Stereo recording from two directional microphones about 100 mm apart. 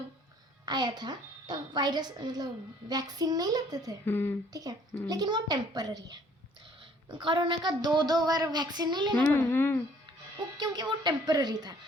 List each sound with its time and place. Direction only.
0.6 s a child's voice: 45° right (ahead or behind)
4.0 s a child's voice: 20° left (ahead or behind)
4.5 s a child's voice: 40° right (ahead or behind)
7.1 s speech: 55° right (ahead or behind)
9.1 s a child's voice: 20° left (ahead or behind)
10.6 s speech: 45° right (ahead or behind)